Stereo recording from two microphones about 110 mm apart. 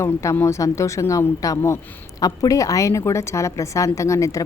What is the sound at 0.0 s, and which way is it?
A woman's voice, 25° left (ahead or behind).